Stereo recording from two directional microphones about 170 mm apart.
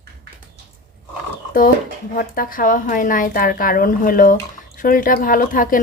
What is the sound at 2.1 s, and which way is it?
Speech, 55° left (ahead or behind).